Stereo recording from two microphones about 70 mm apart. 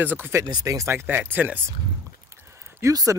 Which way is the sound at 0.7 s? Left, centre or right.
Right.